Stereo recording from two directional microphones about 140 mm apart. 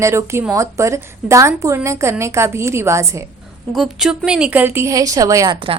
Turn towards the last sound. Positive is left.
turn(degrees=-40)  # may be behind; listen again after turning